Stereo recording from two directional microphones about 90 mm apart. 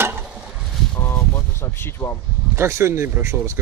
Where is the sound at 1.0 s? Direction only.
25° left (ahead or behind).